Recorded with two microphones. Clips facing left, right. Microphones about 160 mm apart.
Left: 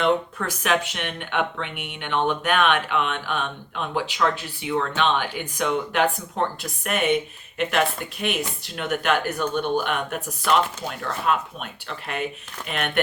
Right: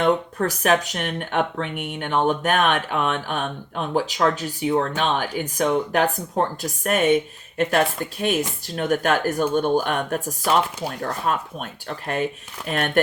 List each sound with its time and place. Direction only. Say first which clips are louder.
0.0 s speech: right 2 dB; 40° right (ahead or behind)